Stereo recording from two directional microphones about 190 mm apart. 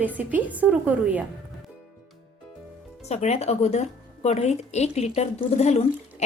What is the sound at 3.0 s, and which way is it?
A woman's voice, 35° left (ahead or behind).